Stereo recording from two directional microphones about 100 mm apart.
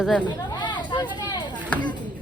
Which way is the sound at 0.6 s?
50° left (ahead or behind).